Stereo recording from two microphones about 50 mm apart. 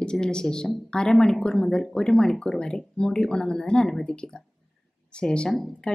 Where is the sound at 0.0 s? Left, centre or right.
Centre.